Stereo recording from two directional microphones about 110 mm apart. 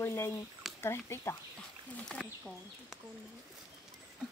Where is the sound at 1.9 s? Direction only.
10° left (ahead or behind).